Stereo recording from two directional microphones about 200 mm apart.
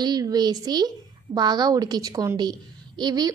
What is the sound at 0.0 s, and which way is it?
A woman's voice, 20° right (ahead or behind).